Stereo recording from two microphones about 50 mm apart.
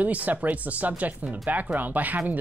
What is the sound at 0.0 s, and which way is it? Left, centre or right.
Speech, right.